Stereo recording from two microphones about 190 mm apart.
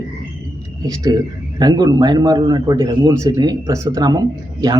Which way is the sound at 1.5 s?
20° right (ahead or behind).